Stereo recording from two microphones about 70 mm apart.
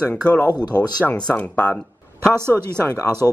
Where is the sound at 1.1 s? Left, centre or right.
Centre.